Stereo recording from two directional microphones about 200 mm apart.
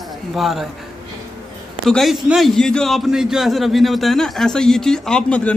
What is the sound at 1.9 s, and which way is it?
A man's voice, centre (ahead or behind).